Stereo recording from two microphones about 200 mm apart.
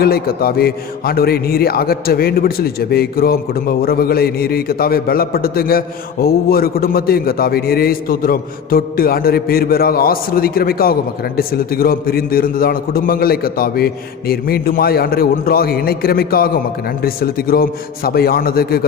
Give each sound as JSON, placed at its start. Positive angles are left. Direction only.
{"t": 0.0, "sound": "speech", "side_deg": 50}